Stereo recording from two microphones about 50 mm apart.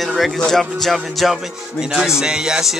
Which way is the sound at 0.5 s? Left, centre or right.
Centre.